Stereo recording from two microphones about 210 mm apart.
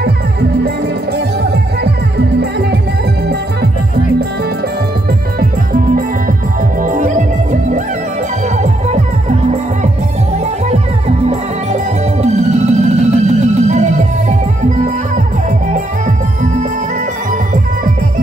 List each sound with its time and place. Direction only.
5.4 s music: 45° right (ahead or behind)
10.7 s music: 30° right (ahead or behind)